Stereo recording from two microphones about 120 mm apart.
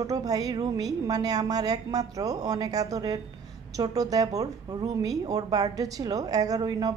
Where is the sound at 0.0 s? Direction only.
30° right (ahead or behind).